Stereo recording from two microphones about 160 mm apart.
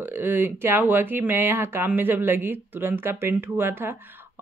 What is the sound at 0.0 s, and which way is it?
Speech, 10° right (ahead or behind).